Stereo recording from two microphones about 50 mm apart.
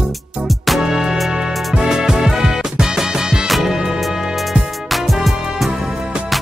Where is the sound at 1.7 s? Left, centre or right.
Centre.